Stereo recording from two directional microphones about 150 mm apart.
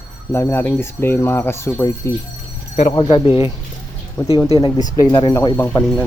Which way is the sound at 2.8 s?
40° left (ahead or behind).